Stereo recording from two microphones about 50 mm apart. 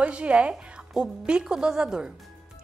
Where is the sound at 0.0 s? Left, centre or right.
Right.